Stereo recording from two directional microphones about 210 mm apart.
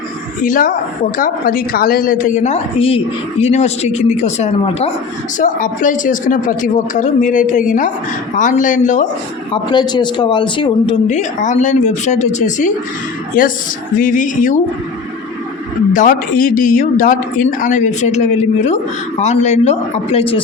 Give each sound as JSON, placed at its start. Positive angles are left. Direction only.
{"t": 0.4, "sound": "speech", "side_deg": 40}
{"t": 9.5, "sound": "a man's voice", "side_deg": 20}
{"t": 11.1, "sound": "speech", "side_deg": 35}
{"t": 15.9, "sound": "speech", "side_deg": 40}